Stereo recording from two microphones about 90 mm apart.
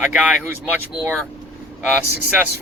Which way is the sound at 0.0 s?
15° right (ahead or behind).